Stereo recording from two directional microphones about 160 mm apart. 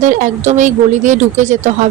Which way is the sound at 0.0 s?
50° right (ahead or behind).